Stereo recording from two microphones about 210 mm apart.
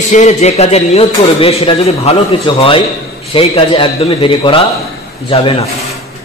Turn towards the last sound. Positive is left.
turn(degrees=25)  # may be behind; listen again after turning